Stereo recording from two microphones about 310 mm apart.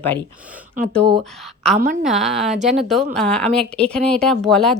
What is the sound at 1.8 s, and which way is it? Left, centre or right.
Speech, right.